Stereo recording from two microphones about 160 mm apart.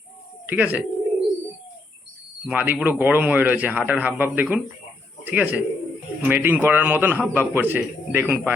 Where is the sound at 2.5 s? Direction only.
10° right (ahead or behind).